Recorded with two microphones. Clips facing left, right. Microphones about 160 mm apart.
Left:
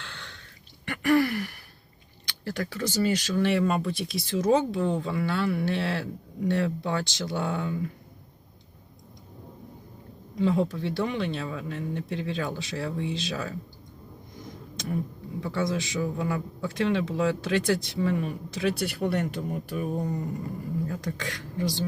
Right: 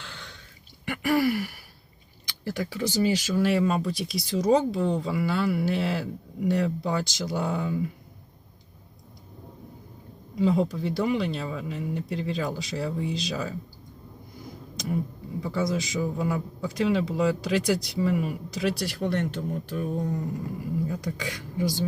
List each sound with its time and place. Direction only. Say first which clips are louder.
0.0 s a sound: even; 5° right (ahead or behind)
0.9 s gasp: left 1 dB; 10° right (ahead or behind)
2.4 s a man's voice: right 1 dB; 10° right (ahead or behind)
10.3 s a man's voice: right 1 dB; 5° right (ahead or behind)
15.4 s a man's voice: right 1 dB; 5° right (ahead or behind)